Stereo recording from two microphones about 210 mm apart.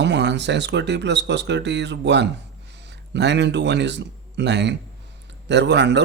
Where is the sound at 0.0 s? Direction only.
55° right (ahead or behind).